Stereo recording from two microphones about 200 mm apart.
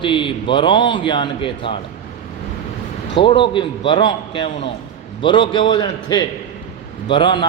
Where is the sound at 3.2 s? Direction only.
25° left (ahead or behind).